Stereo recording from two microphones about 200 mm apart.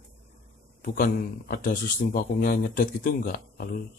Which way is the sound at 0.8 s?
45° left (ahead or behind).